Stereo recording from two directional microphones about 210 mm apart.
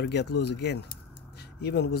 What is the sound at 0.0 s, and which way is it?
Speech, 55° left (ahead or behind).